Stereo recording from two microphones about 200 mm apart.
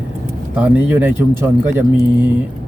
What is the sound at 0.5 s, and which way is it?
Speech, 10° right (ahead or behind).